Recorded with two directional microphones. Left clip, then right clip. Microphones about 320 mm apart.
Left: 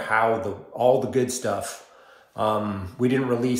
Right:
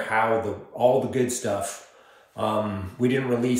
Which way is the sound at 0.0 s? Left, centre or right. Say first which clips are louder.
Left 1 dB; centre.